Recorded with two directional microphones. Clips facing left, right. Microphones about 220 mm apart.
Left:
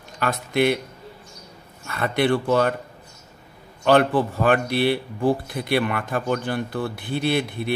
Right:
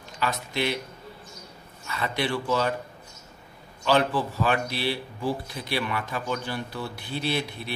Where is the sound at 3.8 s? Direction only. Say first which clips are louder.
Left 6 dB; 55° left (ahead or behind).